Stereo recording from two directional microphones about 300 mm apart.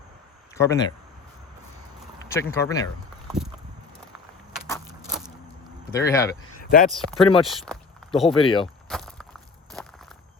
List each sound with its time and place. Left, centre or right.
0.5 s speech: centre
2.3 s speech: centre
5.9 s speech: centre
6.6 s a sound: left
6.9 s speech: centre
8.4 s speech: centre
8.9 s a sound: centre